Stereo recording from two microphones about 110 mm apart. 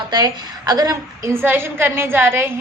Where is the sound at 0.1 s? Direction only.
35° right (ahead or behind).